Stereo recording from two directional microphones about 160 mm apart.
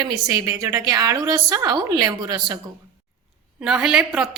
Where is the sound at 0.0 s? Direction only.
25° right (ahead or behind).